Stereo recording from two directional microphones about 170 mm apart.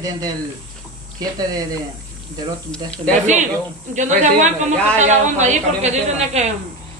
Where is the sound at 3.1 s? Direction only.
45° right (ahead or behind).